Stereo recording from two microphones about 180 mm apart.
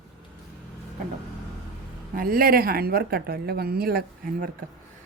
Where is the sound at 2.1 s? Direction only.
55° right (ahead or behind).